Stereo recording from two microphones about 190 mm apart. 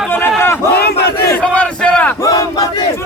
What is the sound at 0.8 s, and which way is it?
Battle cry, 60° left (ahead or behind).